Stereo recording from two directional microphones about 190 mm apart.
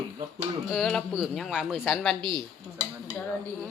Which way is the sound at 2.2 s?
25° right (ahead or behind).